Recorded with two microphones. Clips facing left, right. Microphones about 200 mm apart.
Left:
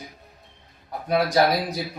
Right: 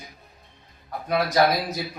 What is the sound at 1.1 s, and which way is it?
Speech, 15° left (ahead or behind).